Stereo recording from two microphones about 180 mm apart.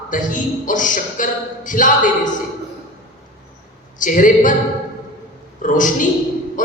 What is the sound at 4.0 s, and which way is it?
Speech, 45° left (ahead or behind).